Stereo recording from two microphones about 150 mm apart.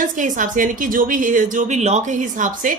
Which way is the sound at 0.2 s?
60° right (ahead or behind).